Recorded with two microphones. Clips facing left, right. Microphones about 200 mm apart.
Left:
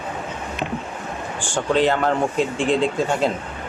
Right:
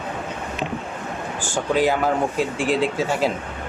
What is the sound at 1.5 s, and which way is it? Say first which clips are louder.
Speech: left 1 dB; 5° right (ahead or behind).